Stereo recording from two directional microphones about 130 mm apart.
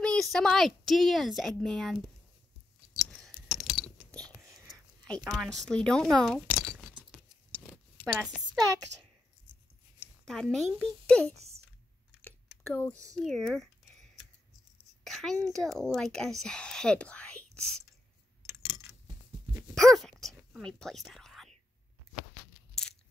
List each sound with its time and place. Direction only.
0.0 s a woman's voice: 5° left (ahead or behind)
3.1 s whispering: 5° left (ahead or behind)
6.1 s speech: 5° left (ahead or behind)
7.1 s patter: 5° right (ahead or behind)
7.6 s zipper: 10° right (ahead or behind)
10.2 s a woman's voice: 5° left (ahead or behind)
11.3 s a sound: 55° right (ahead or behind)
12.6 s speech: 15° left (ahead or behind)
13.1 s speech: centre (ahead or behind)
15.0 s a sound: 5° left (ahead or behind)
15.4 s speech: centre (ahead or behind)
19.7 s whispering: centre (ahead or behind)